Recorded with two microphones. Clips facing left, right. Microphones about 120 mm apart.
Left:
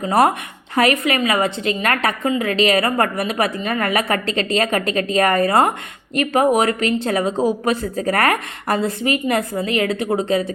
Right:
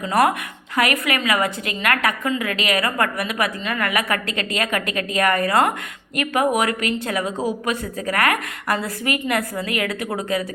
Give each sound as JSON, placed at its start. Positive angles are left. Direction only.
{"t": 0.0, "sound": "a woman's voice", "side_deg": 30}